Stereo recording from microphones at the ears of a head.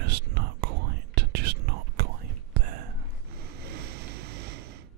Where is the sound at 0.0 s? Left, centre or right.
Right.